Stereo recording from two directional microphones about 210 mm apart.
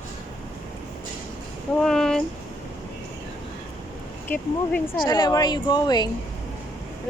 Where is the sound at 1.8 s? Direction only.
Centre (ahead or behind).